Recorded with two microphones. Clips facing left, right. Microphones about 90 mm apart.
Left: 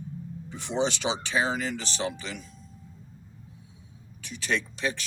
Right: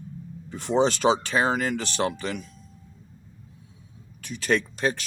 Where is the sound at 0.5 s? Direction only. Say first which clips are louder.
Right 6 dB; 45° right (ahead or behind).